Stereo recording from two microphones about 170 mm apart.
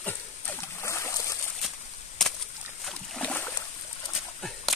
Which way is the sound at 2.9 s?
5° left (ahead or behind).